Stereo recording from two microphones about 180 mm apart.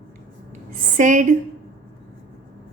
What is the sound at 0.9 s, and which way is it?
Speech, 45° right (ahead or behind).